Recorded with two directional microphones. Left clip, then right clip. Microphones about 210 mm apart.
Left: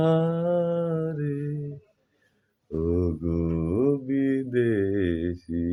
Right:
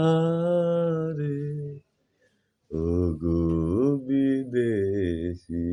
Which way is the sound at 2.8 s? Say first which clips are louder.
Even; 15° right (ahead or behind).